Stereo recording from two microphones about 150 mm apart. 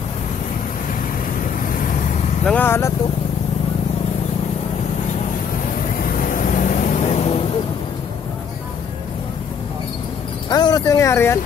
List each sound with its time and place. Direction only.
2.4 s speech: 10° left (ahead or behind)
6.2 s vehicle: 60° left (ahead or behind); by 7.4 s 45° left (ahead or behind)
10.5 s a sound: 25° left (ahead or behind)